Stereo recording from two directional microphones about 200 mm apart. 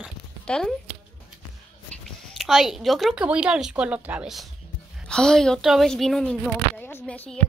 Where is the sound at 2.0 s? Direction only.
Centre (ahead or behind).